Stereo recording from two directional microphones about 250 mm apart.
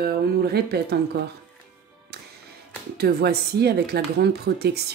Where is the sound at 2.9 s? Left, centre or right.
Right.